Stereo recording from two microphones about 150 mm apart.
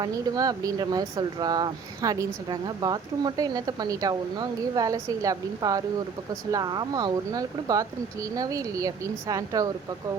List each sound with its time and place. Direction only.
0.0 s speech: 25° right (ahead or behind)